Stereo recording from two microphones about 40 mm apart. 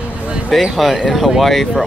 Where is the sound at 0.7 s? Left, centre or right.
Centre.